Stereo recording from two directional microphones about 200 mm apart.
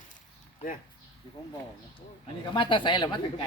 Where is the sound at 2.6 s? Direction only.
25° left (ahead or behind).